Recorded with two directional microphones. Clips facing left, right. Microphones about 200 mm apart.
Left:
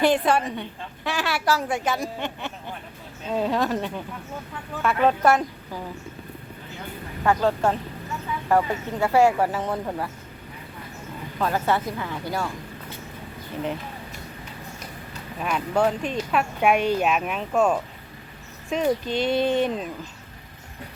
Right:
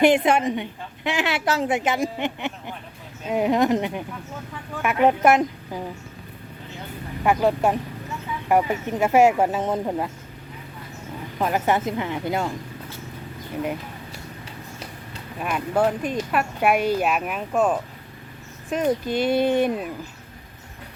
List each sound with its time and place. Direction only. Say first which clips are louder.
0.0 s a woman's voice: right 3 dB; 20° right (ahead or behind)
7.3 s a woman's voice: right 1 dB; 15° right (ahead or behind)
11.3 s a woman's voice: right 2 dB; 15° right (ahead or behind)
15.4 s speech: right 1 dB; 5° right (ahead or behind)